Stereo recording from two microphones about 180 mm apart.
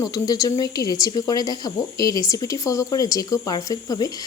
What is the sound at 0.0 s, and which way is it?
A woman's voice, 20° left (ahead or behind).